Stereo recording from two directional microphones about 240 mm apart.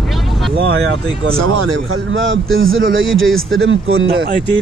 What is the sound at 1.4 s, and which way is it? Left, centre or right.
Speech, right.